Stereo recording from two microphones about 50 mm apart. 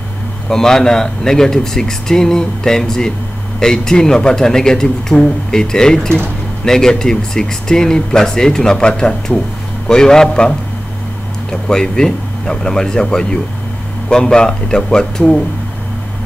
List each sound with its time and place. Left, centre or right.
0.5 s speech: centre
11.5 s speech: centre